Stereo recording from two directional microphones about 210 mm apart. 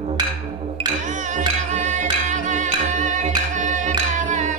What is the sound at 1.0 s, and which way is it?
Music, 35° right (ahead or behind).